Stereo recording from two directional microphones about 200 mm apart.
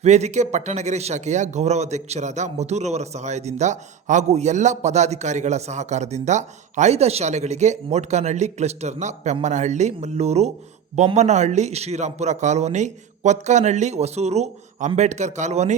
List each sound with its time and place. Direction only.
0.0 s speech: 35° right (ahead or behind)